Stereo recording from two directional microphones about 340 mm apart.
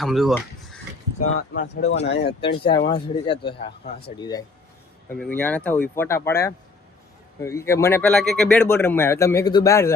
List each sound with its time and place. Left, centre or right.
0.0 s speech: centre
1.4 s speech: left
1.8 s speech: centre
2.0 s speech: left
2.6 s speech: centre